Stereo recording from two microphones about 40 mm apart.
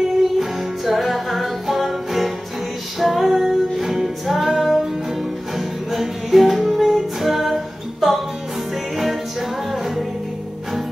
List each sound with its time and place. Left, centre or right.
0.2 s music: centre
5.9 s music: centre
9.7 s music: centre